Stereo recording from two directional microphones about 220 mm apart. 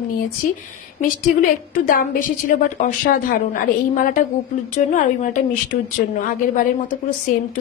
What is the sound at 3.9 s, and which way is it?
A woman's voice, 40° left (ahead or behind).